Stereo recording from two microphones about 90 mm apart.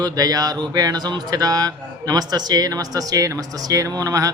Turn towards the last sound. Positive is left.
turn(degrees=-40)  # may be behind; listen again after turning